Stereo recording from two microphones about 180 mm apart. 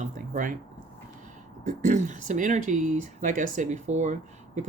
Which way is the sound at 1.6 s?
40° right (ahead or behind).